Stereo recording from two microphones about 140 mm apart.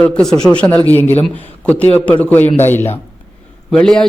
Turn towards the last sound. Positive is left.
turn(degrees=5)  # may be behind; listen again after turning